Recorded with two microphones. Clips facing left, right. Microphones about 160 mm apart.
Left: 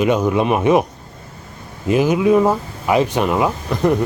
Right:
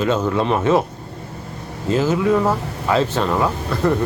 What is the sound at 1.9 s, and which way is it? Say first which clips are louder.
Speech: left 3 dB; 15° left (ahead or behind).